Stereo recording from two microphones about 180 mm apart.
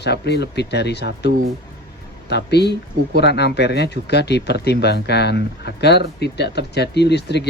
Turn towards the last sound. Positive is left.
turn(degrees=70)  # may be behind; listen again after turning